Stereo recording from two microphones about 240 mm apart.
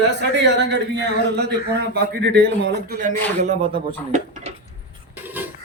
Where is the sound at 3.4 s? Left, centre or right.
Right.